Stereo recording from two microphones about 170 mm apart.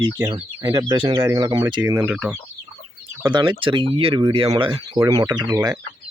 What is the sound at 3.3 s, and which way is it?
Speech, 25° right (ahead or behind).